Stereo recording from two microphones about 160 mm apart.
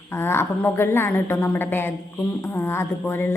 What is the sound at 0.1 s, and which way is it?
A woman's voice, 15° left (ahead or behind).